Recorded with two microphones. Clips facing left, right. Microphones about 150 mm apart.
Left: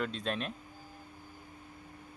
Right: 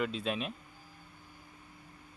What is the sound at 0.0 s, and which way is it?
Speech, 5° right (ahead or behind).